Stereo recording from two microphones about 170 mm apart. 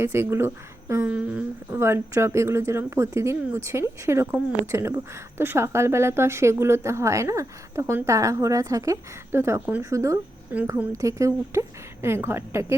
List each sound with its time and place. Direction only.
0.0 s a woman's voice: 15° right (ahead or behind)